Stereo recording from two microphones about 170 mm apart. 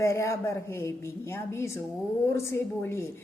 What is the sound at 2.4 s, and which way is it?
Speech, 15° left (ahead or behind).